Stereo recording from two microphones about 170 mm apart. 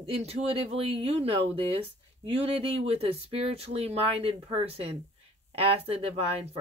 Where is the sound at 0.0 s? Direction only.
35° right (ahead or behind).